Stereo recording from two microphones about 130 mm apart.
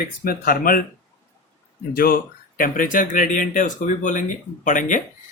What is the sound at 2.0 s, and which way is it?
Speech, 90° left.